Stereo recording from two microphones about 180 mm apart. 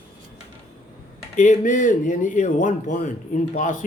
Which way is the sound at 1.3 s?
45° left (ahead or behind).